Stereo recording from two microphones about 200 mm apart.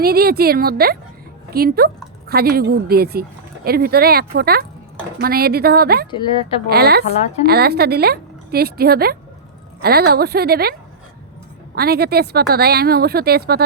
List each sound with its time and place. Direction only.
0.0 s speech: 50° right (ahead or behind)
6.1 s speech: 25° left (ahead or behind)
6.7 s speech: 50° right (ahead or behind)